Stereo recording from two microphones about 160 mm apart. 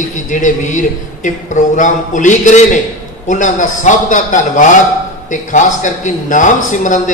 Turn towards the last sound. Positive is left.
turn(degrees=50)  # may be behind; listen again after turning